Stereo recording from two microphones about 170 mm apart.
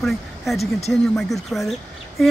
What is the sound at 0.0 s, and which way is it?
Speech, centre (ahead or behind).